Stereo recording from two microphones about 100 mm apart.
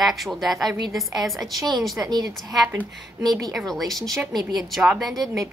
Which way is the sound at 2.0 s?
35° right (ahead or behind).